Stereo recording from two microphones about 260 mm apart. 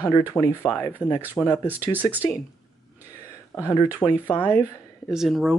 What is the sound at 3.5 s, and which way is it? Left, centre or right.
Speech, centre.